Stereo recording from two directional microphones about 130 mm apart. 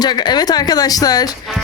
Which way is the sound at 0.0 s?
35° left (ahead or behind).